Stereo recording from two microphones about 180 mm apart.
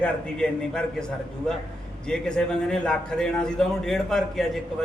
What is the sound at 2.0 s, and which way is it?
A man's voice, 5° left (ahead or behind).